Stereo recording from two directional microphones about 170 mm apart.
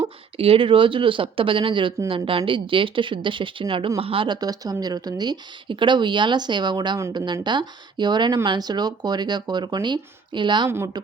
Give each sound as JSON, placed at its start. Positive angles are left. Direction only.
{"t": 0.0, "sound": "speech", "side_deg": -35}
{"t": 10.7, "sound": "speech", "side_deg": -15}